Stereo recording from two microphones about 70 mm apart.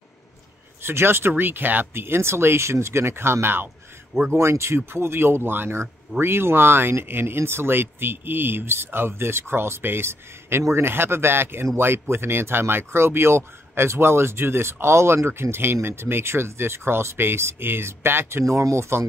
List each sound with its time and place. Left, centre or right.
0.8 s speech: right
18.4 s speech: right